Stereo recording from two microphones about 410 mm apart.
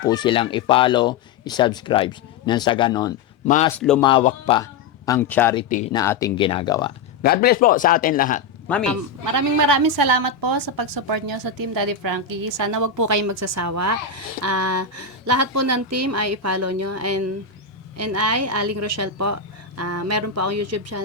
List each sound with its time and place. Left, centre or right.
0.0 s speech: centre
3.7 s speech: centre
4.1 s speech: centre
5.6 s speech: centre
7.2 s a man's voice: left
8.6 s speech: centre
9.2 s a woman's voice: right